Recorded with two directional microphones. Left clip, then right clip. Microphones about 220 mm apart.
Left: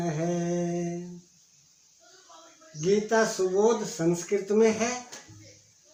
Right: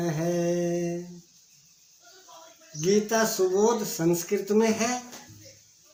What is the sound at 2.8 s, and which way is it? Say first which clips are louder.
Speech: even; 35° right (ahead or behind).